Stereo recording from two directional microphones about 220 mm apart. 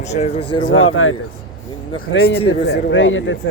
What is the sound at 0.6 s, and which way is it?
Speech, 65° left (ahead or behind).